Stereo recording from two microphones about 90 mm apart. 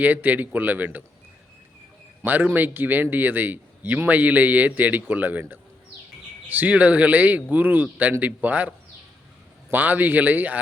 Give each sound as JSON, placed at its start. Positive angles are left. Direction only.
{"t": 0.0, "sound": "speech", "side_deg": -20}
{"t": 2.2, "sound": "speech", "side_deg": -20}
{"t": 9.7, "sound": "speech", "side_deg": -20}